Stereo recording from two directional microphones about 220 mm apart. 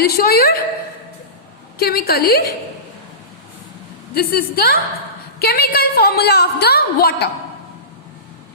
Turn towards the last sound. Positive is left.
turn(degrees=45)  # may be behind; listen again after turning